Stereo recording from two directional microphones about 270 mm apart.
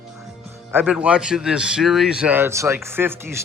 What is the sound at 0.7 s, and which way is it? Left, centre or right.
Speech, centre.